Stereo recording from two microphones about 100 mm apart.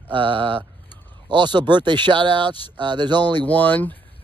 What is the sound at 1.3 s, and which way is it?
Speech, 50° right (ahead or behind).